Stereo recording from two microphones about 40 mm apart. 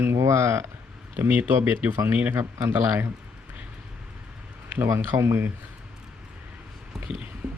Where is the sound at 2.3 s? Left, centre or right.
Right.